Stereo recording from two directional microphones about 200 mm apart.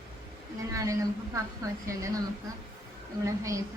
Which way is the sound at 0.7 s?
15° right (ahead or behind).